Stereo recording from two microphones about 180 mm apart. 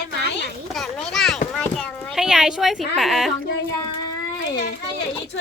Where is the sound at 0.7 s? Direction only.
5° left (ahead or behind).